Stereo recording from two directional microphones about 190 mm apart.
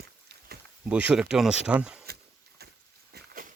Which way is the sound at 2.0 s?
55° right (ahead or behind).